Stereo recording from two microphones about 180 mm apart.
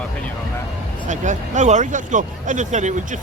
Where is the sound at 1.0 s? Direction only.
45° right (ahead or behind).